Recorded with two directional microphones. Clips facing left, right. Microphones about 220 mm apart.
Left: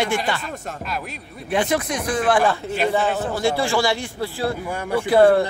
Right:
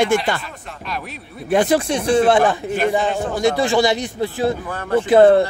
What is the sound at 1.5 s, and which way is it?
A man's voice, 35° right (ahead or behind).